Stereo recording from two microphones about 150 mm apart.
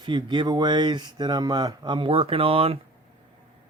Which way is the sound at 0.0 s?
30° right (ahead or behind).